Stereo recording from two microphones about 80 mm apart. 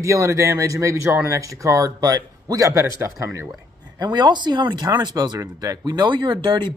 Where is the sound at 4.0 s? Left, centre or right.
Right.